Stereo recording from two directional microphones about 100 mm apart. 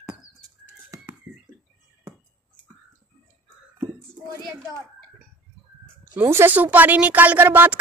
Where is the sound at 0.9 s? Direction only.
30° right (ahead or behind).